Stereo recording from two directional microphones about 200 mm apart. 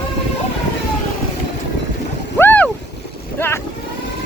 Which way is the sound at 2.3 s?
10° left (ahead or behind).